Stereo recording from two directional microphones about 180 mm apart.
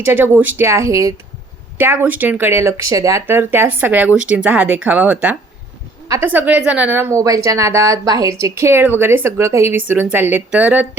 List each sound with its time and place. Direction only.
0.0 s a woman's voice: 10° right (ahead or behind)